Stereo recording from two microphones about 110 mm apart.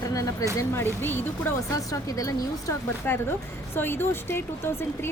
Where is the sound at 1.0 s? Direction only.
20° left (ahead or behind).